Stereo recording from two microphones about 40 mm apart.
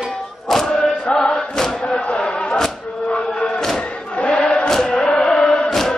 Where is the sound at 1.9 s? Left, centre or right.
Left.